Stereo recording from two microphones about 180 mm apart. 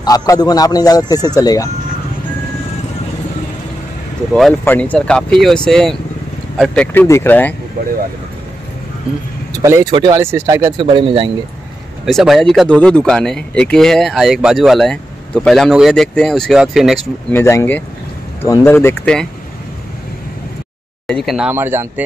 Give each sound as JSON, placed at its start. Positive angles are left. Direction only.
{"t": 0.0, "sound": "speech", "side_deg": 20}
{"t": 4.4, "sound": "speech", "side_deg": 5}
{"t": 9.5, "sound": "speech", "side_deg": -15}
{"t": 10.8, "sound": "speech", "side_deg": -30}
{"t": 12.1, "sound": "speech", "side_deg": 0}
{"t": 17.3, "sound": "speech", "side_deg": 15}
{"t": 21.1, "sound": "speech", "side_deg": 0}
{"t": 21.5, "sound": "speech", "side_deg": -10}